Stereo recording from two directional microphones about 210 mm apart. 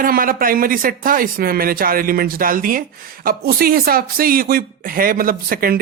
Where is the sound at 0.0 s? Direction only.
40° right (ahead or behind).